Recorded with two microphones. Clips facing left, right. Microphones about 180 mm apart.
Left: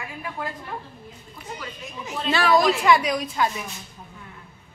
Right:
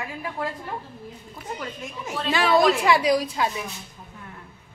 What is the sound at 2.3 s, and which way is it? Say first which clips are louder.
A woman's voice: even; 25° right (ahead or behind).